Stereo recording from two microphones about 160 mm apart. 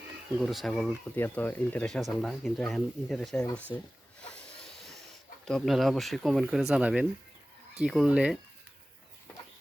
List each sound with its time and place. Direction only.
0.3 s speech: centre (ahead or behind)
1.1 s speech: 10° left (ahead or behind)
3.7 s speech: 25° left (ahead or behind)
4.4 s a sound: 5° left (ahead or behind)
5.5 s speech: centre (ahead or behind)